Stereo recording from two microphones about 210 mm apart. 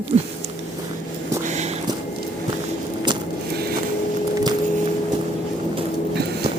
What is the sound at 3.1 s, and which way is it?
Vehicle, 20° right (ahead or behind).